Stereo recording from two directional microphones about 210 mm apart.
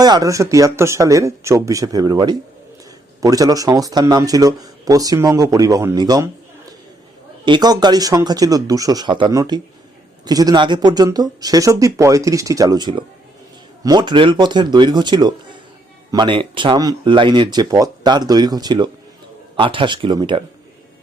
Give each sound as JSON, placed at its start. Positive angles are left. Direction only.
{"t": 0.0, "sound": "speech", "side_deg": -20}
{"t": 7.4, "sound": "speech", "side_deg": -20}